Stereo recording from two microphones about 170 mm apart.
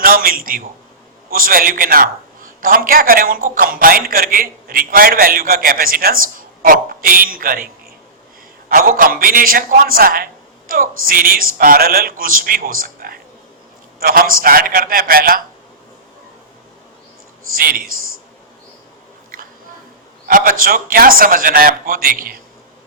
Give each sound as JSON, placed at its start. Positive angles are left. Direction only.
{"t": 0.0, "sound": "a man's voice", "side_deg": -60}
{"t": 8.7, "sound": "a man's voice", "side_deg": -55}
{"t": 17.5, "sound": "a man's voice", "side_deg": -60}
{"t": 20.2, "sound": "a man's voice", "side_deg": -55}